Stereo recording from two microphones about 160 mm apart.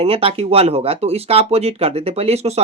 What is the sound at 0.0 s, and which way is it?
Speech, 35° right (ahead or behind).